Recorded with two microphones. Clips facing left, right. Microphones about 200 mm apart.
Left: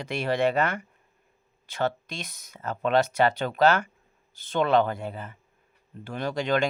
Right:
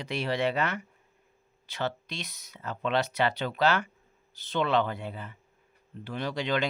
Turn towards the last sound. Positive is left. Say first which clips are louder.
# left 4 dB
turn(degrees=45)  # may be behind; listen again after turning